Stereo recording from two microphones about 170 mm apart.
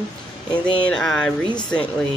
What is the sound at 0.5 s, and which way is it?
Speech, 25° left (ahead or behind).